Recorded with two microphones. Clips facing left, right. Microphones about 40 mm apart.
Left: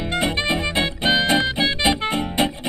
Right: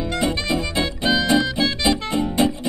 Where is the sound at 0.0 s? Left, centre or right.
Left.